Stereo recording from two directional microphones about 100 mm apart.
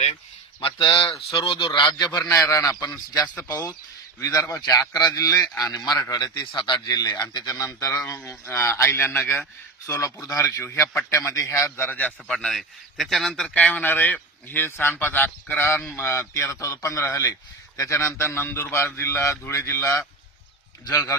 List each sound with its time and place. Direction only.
0.6 s a man's voice: 60° left (ahead or behind)
2.5 s speech: 35° left (ahead or behind)
4.4 s speech: 25° left (ahead or behind)
4.6 s speech: 40° left (ahead or behind)
6.5 s speech: 50° left (ahead or behind); by 11.9 s 30° left (ahead or behind)
11.9 s speech: 20° left (ahead or behind)
12.3 s speech: 5° left (ahead or behind); by 20.1 s 25° left (ahead or behind)